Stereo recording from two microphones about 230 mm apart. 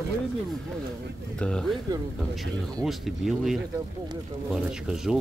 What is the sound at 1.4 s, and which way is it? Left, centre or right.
Speech, centre.